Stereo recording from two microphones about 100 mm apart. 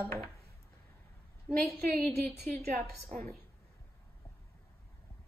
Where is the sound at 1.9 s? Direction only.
5° left (ahead or behind).